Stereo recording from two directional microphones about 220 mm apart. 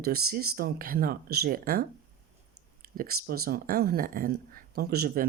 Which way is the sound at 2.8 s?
40° right (ahead or behind).